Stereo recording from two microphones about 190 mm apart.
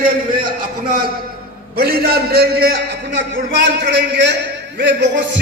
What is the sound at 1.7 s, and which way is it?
A man's voice, 50° right (ahead or behind).